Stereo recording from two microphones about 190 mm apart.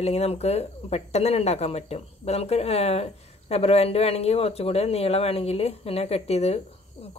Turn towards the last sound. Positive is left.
turn(degrees=35)  # may be behind; listen again after turning